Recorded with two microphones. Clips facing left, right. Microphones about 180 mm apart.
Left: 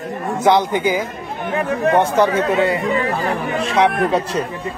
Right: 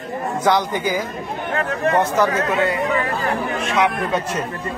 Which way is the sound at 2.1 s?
30° left (ahead or behind).